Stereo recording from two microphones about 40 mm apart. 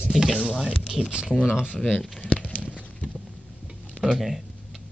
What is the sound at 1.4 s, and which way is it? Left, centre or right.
Speech, right.